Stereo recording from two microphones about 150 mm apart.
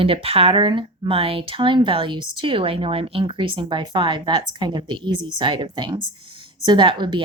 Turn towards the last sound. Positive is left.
turn(degrees=-35)  # may be behind; listen again after turning